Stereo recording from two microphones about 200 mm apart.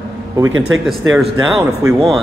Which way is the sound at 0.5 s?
80° right.